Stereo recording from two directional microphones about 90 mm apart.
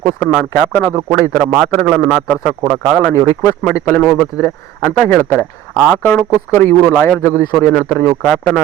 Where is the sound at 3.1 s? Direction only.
30° left (ahead or behind).